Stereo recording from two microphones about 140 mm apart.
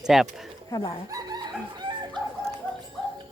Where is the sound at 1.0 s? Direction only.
25° right (ahead or behind).